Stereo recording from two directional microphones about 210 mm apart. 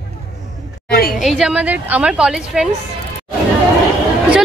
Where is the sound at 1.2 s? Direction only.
5° right (ahead or behind).